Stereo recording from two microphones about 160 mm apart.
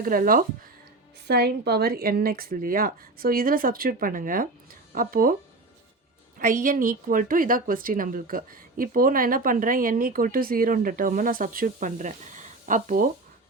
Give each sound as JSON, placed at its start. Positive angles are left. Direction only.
{"t": 0.0, "sound": "a woman's voice", "side_deg": -60}
{"t": 1.3, "sound": "a woman's voice", "side_deg": -90}
{"t": 6.4, "sound": "a woman's voice", "side_deg": -60}